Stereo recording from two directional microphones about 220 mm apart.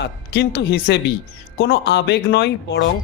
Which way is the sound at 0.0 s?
50° left (ahead or behind).